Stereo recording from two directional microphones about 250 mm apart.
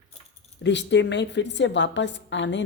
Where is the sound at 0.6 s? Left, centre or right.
Left.